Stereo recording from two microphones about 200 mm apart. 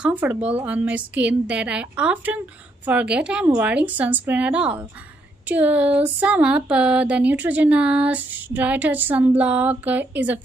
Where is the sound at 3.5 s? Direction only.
10° right (ahead or behind).